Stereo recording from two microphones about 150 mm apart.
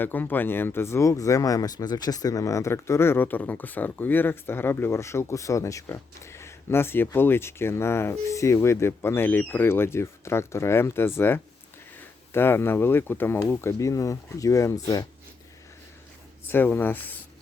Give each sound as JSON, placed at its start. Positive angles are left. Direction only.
{"t": 0.0, "sound": "speech", "side_deg": 10}
{"t": 12.3, "sound": "speech", "side_deg": 15}
{"t": 16.5, "sound": "speech", "side_deg": 15}